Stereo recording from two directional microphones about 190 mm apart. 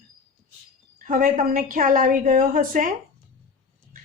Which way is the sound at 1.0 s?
45° right (ahead or behind).